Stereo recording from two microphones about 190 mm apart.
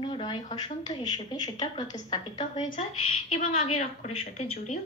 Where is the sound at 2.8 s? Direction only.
30° left (ahead or behind).